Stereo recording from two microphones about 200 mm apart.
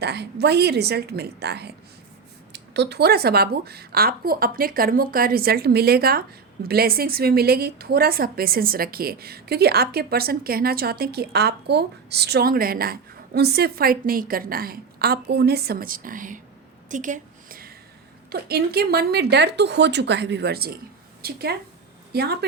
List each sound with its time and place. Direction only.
0.0 s a woman's voice: 55° right (ahead or behind)
16.9 s a sound: 40° right (ahead or behind)
18.3 s a woman's voice: 50° right (ahead or behind)